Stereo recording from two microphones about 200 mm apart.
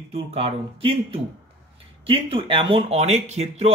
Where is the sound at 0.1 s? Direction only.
30° right (ahead or behind).